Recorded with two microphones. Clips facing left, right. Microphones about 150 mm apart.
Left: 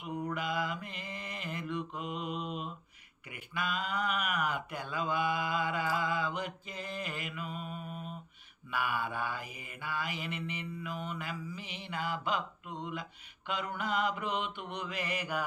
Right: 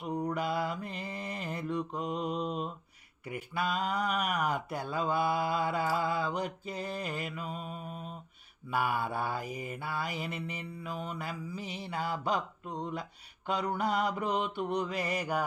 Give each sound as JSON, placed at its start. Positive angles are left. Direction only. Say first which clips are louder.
{"t": 0.0, "sound": "mantra", "louder": "right 4 dB", "side_deg": -35}